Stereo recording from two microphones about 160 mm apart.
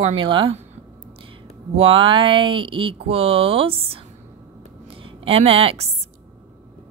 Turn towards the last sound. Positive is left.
turn(degrees=-40)  # may be behind; listen again after turning